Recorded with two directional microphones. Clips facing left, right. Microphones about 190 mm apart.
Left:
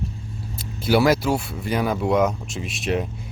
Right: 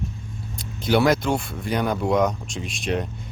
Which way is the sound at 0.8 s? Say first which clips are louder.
Left 1 dB; 5° left (ahead or behind).